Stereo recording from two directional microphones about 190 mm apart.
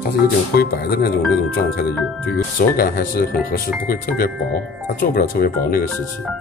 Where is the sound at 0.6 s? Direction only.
55° left (ahead or behind).